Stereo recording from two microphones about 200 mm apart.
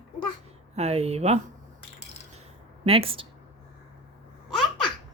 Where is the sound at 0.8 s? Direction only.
30° right (ahead or behind).